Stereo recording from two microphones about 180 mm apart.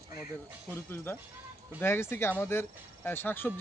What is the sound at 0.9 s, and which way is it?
Speech, 10° left (ahead or behind).